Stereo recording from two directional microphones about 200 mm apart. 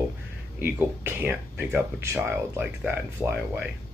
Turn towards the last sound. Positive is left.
turn(degrees=-10)  # may be behind; listen again after turning